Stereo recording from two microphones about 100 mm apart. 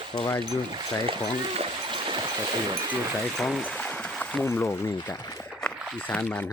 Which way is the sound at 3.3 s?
Centre (ahead or behind).